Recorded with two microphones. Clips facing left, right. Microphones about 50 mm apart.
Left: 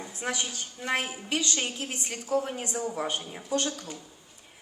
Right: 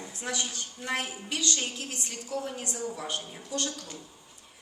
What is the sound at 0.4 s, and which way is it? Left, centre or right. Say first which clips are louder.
A woman's voice: left 2 dB; left.